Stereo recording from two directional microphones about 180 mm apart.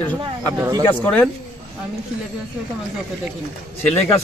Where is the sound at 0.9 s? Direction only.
10° left (ahead or behind).